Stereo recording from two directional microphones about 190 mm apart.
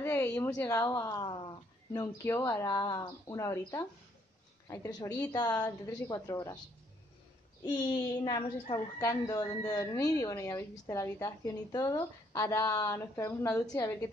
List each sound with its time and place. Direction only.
0.0 s a woman's voice: 15° left (ahead or behind)
8.2 s a woman's voice: 25° left (ahead or behind)